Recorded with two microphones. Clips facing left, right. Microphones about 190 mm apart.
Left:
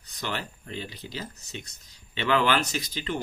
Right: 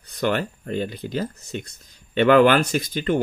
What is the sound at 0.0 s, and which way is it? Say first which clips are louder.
Speech: right 11 dB; 55° right (ahead or behind).